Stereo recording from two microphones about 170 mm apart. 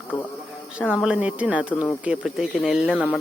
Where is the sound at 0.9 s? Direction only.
5° right (ahead or behind).